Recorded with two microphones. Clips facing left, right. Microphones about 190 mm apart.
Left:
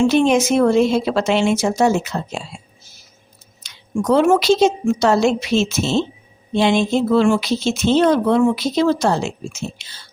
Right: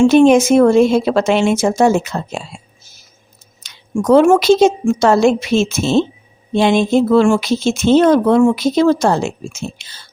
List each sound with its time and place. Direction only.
0.0 s speech: 50° right (ahead or behind)
3.6 s speech: 50° right (ahead or behind)